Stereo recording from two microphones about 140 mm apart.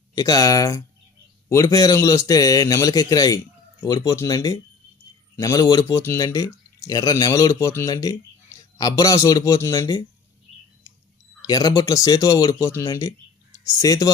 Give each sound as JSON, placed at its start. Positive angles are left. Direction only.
{"t": 0.2, "sound": "speech", "side_deg": 25}
{"t": 11.4, "sound": "speech", "side_deg": 25}